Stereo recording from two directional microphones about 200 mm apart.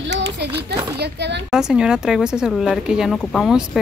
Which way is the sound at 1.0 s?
55° right (ahead or behind).